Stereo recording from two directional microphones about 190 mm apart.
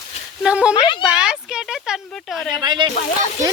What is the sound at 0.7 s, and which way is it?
Speech, 25° left (ahead or behind).